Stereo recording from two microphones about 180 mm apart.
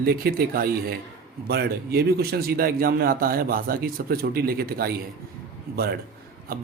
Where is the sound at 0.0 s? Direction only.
55° right (ahead or behind).